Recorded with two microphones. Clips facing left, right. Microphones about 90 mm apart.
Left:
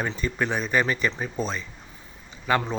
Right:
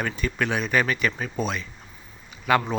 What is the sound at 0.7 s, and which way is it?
Speech, 25° left (ahead or behind).